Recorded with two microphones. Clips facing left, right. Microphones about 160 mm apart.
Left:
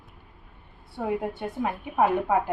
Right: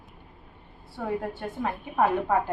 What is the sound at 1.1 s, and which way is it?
A woman's voice, 15° left (ahead or behind).